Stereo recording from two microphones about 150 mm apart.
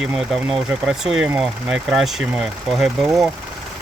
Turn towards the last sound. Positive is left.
turn(degrees=0)  # may be behind; listen again after turning